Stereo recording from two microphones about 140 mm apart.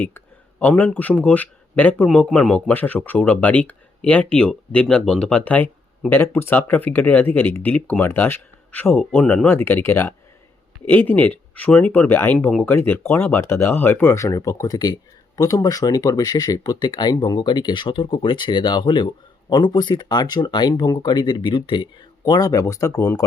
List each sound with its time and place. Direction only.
0.6 s speech: 10° left (ahead or behind)